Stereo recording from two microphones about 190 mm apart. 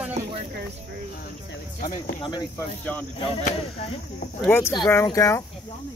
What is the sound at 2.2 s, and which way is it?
Speech, 25° left (ahead or behind).